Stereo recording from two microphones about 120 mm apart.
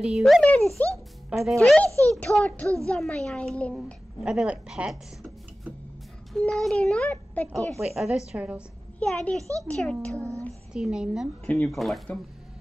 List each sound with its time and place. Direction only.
0.0 s speech: centre (ahead or behind)
0.4 s a child's voice: 10° left (ahead or behind)
1.3 s speech: centre (ahead or behind)
1.9 s a child's voice: 25° right (ahead or behind)
2.1 s a child's voice: 10° left (ahead or behind)
3.7 s a child's voice: 5° right (ahead or behind)
7.8 s a woman's voice: centre (ahead or behind)
9.0 s a child's voice: 10° left (ahead or behind)
9.4 s a child's voice: 25° right (ahead or behind)
9.7 s a child's voice: 5° left (ahead or behind)
10.7 s speech: 5° right (ahead or behind)
11.4 s speech: 5° left (ahead or behind)